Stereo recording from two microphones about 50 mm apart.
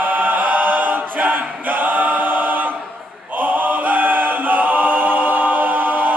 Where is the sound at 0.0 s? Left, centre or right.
Right.